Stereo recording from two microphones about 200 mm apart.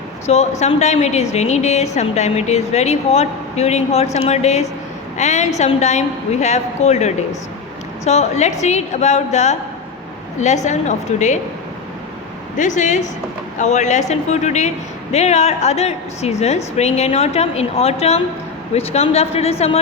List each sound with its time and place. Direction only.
0.3 s a woman's voice: 35° left (ahead or behind)
10.7 s a woman's voice: 35° left (ahead or behind)
12.5 s a woman's voice: 40° left (ahead or behind)